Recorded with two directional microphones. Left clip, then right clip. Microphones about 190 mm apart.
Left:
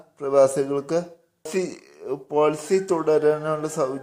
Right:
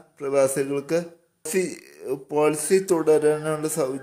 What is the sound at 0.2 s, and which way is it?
A man's voice, 5° right (ahead or behind).